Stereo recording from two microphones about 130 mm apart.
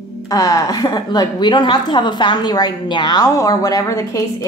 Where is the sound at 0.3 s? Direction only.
30° left (ahead or behind).